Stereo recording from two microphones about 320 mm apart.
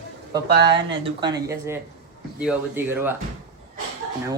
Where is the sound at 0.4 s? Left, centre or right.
Right.